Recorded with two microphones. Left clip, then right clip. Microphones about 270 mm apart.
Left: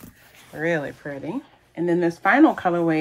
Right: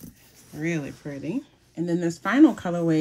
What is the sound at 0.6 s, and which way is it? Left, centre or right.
Speech, centre.